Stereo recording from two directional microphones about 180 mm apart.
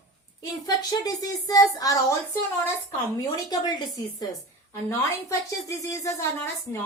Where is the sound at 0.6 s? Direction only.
20° left (ahead or behind).